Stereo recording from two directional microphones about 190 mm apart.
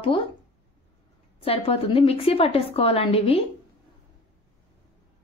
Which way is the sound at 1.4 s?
30° left (ahead or behind).